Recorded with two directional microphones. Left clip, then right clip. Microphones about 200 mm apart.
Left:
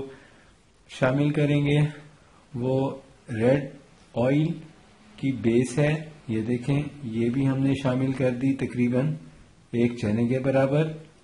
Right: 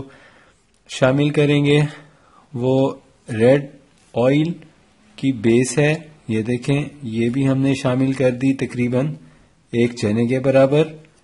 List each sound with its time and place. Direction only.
0.9 s a man's voice: 50° right (ahead or behind)